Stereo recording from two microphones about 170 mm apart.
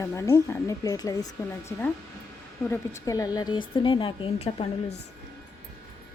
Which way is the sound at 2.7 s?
20° left (ahead or behind).